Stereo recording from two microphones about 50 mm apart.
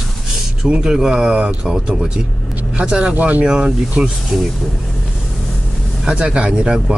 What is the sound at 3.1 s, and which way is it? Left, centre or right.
Speech, right.